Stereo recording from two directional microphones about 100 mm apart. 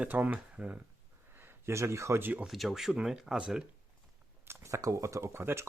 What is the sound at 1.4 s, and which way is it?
Speech, 25° right (ahead or behind).